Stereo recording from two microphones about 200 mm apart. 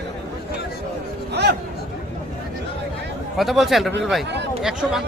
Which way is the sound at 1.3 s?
55° right (ahead or behind).